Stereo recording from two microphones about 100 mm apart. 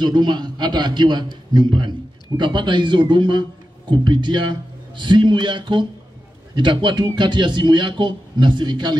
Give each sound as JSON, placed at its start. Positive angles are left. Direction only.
{"t": 0.0, "sound": "a man's voice", "side_deg": -50}